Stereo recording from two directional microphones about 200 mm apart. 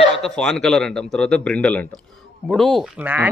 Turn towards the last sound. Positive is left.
turn(degrees=-10)  # may be behind; listen again after turning